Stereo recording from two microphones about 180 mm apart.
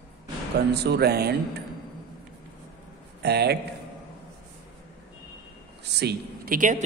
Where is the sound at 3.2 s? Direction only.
65° right (ahead or behind).